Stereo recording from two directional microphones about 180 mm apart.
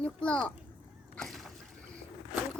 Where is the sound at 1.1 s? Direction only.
Centre (ahead or behind).